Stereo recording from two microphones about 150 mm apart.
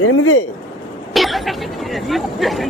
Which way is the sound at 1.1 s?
Centre (ahead or behind).